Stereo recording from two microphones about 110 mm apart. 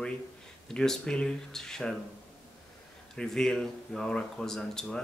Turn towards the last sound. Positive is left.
turn(degrees=5)  # may be behind; listen again after turning